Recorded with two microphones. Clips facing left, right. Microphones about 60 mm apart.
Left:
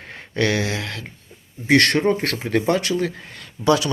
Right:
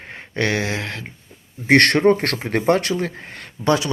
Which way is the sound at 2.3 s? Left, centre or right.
Right.